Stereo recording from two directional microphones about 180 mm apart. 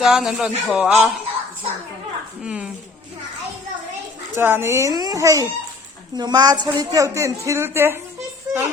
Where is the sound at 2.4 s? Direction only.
5° right (ahead or behind).